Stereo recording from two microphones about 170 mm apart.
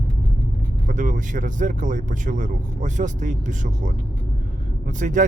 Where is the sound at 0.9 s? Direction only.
50° right (ahead or behind).